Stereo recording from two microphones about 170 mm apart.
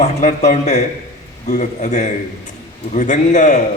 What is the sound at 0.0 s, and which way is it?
A man's voice, 45° left (ahead or behind).